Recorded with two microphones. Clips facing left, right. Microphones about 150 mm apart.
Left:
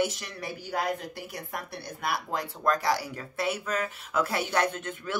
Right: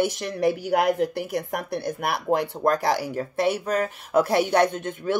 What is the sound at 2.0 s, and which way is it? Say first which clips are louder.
Speech: right 6 dB; 65° right (ahead or behind).